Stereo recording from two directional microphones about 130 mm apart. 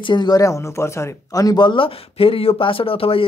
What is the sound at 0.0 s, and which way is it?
Speech, 35° left (ahead or behind).